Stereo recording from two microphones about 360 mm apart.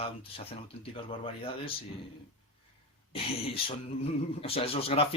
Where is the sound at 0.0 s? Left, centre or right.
Centre.